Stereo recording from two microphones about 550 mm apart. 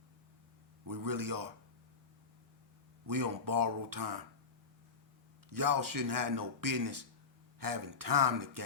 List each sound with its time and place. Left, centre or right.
0.9 s a man's voice: right
3.1 s speech: right
5.5 s speech: right